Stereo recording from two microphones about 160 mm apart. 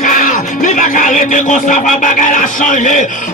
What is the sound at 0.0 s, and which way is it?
Music, 55° left (ahead or behind).